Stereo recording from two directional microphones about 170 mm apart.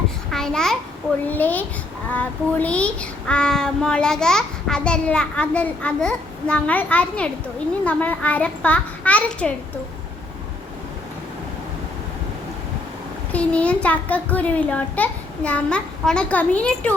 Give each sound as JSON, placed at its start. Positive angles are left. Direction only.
{"t": 0.3, "sound": "a sound", "side_deg": 5}
{"t": 1.3, "sound": "a child's voice", "side_deg": 10}
{"t": 13.3, "sound": "a child's voice", "side_deg": 5}